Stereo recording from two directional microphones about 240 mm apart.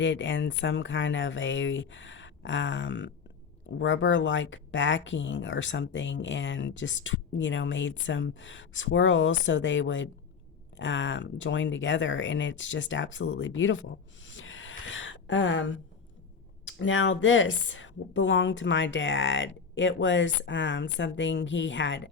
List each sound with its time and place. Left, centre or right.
0.0 s speech: left
14.3 s a sound: left
16.6 s speech: left